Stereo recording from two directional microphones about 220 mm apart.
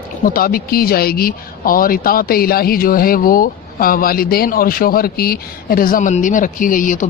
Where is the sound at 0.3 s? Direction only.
40° left (ahead or behind).